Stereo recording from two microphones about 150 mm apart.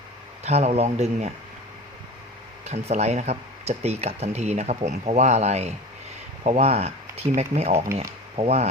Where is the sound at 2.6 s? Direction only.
45° right (ahead or behind).